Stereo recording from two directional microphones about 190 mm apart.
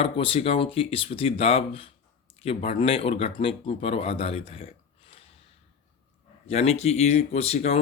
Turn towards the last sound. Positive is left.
turn(degrees=35)  # may be behind; listen again after turning